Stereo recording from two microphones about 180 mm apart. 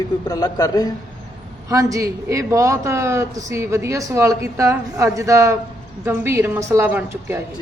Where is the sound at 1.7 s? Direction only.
20° right (ahead or behind).